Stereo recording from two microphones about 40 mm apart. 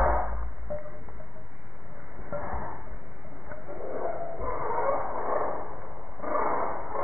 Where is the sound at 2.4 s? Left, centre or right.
Centre.